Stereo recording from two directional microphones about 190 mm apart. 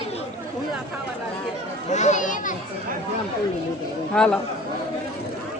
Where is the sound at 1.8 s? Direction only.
35° left (ahead or behind).